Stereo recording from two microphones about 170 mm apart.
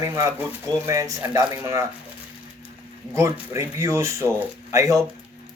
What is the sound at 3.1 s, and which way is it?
Speech, 15° right (ahead or behind).